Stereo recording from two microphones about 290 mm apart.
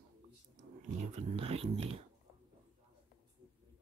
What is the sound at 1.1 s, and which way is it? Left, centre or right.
Speech, centre.